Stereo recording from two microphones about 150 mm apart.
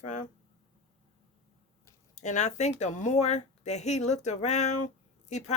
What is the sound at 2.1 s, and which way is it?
A woman's voice, 50° left (ahead or behind).